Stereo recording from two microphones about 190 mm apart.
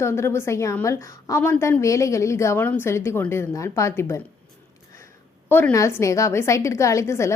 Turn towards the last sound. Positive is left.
turn(degrees=15)  # may be behind; listen again after turning